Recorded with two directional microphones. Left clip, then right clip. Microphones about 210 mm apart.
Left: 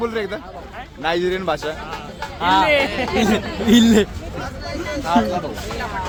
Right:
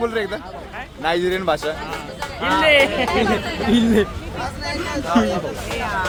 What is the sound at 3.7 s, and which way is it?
Speech, 40° left (ahead or behind).